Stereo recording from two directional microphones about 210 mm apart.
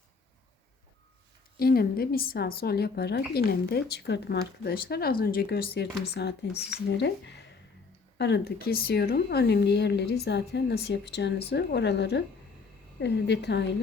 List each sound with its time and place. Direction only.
1.5 s a woman's voice: 45° left (ahead or behind)